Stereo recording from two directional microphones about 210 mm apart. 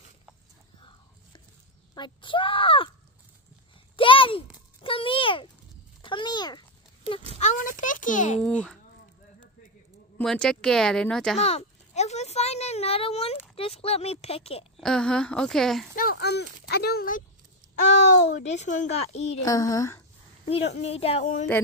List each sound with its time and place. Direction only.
2.0 s speech: 25° left (ahead or behind)
3.9 s a sound: 25° left (ahead or behind)
7.3 s a sound: 35° left (ahead or behind)
8.4 s speech: 5° left (ahead or behind)
10.1 s speech: 5° left (ahead or behind)
11.3 s a sound: 30° left (ahead or behind)
14.8 s speech: 5° left (ahead or behind)
15.9 s speech: 45° left (ahead or behind)
17.7 s a child's voice: 35° left (ahead or behind)
19.4 s speech: 15° left (ahead or behind)
20.4 s a child's voice: 30° left (ahead or behind)